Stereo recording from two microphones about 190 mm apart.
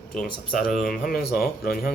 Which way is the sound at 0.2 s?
50° left (ahead or behind).